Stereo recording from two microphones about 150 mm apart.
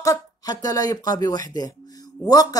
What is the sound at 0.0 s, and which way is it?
Speech, 25° left (ahead or behind).